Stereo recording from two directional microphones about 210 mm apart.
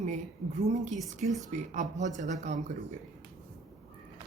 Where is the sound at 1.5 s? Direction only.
35° right (ahead or behind).